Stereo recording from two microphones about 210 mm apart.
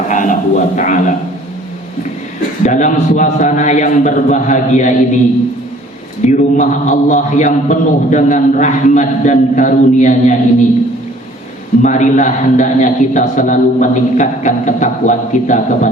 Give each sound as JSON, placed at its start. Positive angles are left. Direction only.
{"t": 0.1, "sound": "music", "side_deg": 35}
{"t": 2.6, "sound": "a man's voice", "side_deg": 35}
{"t": 6.2, "sound": "a man's voice", "side_deg": 35}
{"t": 11.8, "sound": "a man's voice", "side_deg": 35}